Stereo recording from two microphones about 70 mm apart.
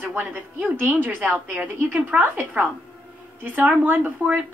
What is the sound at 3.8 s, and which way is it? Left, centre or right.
Speech, right.